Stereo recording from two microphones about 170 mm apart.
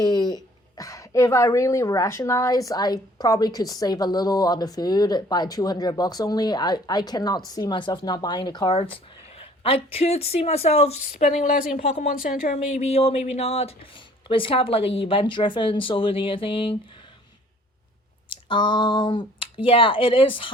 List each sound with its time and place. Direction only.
0.0 s a woman's voice: 25° left (ahead or behind)
12.2 s speech: 50° left (ahead or behind); by 16.7 s 30° left (ahead or behind)
18.4 s a woman's voice: 30° left (ahead or behind)